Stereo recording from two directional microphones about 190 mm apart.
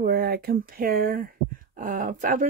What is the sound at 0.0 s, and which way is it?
Speech, 50° right (ahead or behind).